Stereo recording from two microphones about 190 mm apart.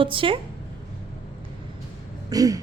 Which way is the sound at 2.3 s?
20° right (ahead or behind).